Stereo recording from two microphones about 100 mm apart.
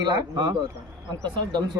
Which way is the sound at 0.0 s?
45° right (ahead or behind).